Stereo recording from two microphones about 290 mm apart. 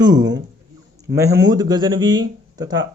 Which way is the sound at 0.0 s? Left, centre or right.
Centre.